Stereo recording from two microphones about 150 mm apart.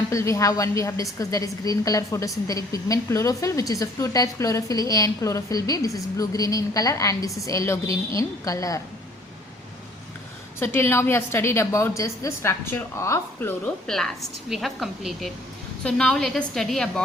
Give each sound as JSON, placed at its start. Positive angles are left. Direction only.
{"t": 0.1, "sound": "a woman's voice", "side_deg": 20}
{"t": 10.6, "sound": "a woman's voice", "side_deg": 15}
{"t": 13.8, "sound": "a woman's voice", "side_deg": 5}